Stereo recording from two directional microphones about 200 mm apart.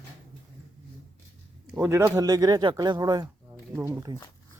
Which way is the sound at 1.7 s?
10° right (ahead or behind).